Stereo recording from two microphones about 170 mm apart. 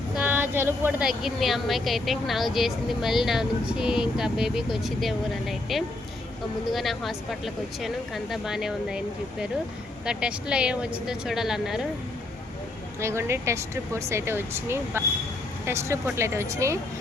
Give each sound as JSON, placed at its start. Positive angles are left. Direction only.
{"t": 0.2, "sound": "a woman's voice", "side_deg": -10}
{"t": 10.1, "sound": "a woman's voice", "side_deg": -5}
{"t": 13.0, "sound": "speech", "side_deg": -15}